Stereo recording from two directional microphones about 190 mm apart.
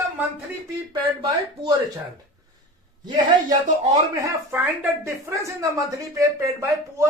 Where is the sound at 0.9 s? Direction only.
20° right (ahead or behind).